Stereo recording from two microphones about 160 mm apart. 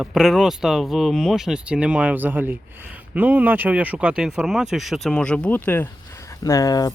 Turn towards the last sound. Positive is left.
turn(degrees=25)  # may be behind; listen again after turning